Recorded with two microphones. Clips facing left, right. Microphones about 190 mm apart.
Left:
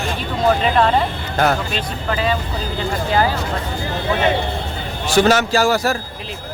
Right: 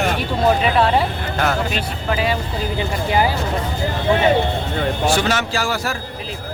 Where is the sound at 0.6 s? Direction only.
10° right (ahead or behind).